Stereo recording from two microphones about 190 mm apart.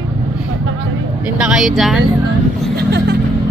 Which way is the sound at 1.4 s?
5° right (ahead or behind).